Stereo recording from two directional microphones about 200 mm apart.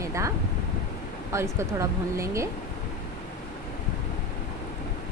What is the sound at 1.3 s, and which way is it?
A woman's voice, 15° right (ahead or behind).